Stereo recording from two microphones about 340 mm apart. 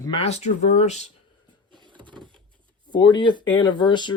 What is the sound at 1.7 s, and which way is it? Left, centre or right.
Vehicle, centre.